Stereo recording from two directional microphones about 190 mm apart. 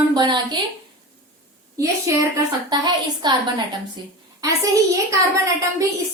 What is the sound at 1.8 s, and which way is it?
A woman's voice, 15° right (ahead or behind).